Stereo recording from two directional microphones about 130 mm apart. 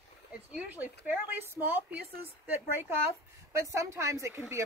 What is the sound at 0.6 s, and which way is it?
Speech, 15° right (ahead or behind).